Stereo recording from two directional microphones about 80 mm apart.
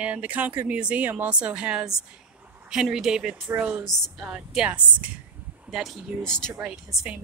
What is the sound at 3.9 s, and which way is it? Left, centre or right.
Speech, centre.